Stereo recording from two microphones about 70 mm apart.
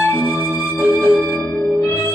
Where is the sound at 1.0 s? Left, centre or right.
Left.